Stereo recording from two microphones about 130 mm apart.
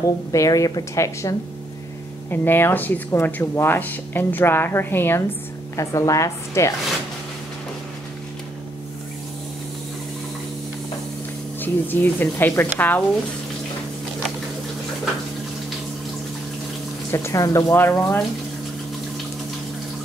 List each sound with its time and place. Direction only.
0.3 s a woman's voice: 25° left (ahead or behind)
11.6 s speech: 15° left (ahead or behind)
17.1 s a woman's voice: 25° left (ahead or behind)